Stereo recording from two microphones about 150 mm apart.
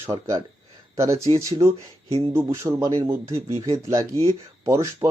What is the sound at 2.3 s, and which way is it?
Speech, 15° right (ahead or behind).